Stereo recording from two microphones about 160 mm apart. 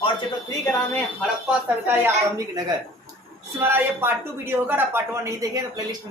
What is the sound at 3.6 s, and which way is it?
Speech, 15° right (ahead or behind).